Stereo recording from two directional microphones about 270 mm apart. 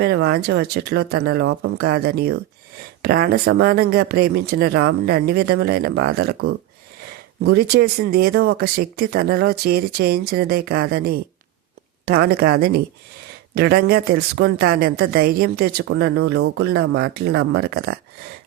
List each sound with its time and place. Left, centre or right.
0.3 s speech: right